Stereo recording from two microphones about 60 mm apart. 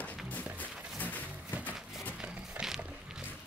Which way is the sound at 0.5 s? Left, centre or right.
Left.